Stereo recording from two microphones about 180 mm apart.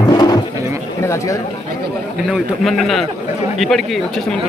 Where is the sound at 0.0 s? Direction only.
20° left (ahead or behind).